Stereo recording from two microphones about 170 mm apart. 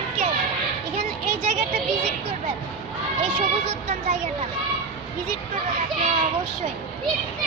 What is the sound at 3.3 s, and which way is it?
Speech, 40° right (ahead or behind).